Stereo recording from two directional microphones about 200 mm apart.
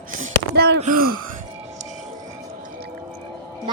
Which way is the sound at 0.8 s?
45° right (ahead or behind).